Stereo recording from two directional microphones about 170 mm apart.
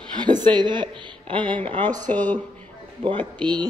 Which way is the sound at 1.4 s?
10° left (ahead or behind).